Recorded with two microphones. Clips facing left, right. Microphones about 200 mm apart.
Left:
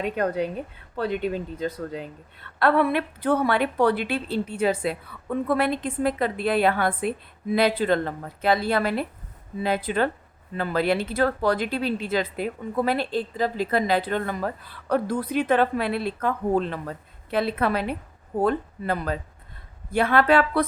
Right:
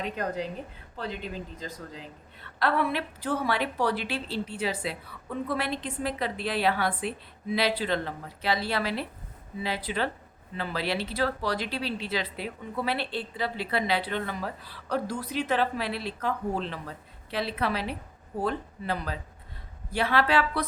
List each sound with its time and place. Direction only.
0.9 s speech: 60° left (ahead or behind)